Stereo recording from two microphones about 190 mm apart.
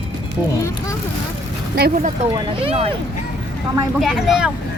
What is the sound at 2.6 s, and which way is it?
Speech, 30° right (ahead or behind).